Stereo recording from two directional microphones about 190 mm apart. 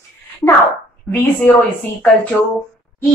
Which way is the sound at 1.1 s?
10° left (ahead or behind).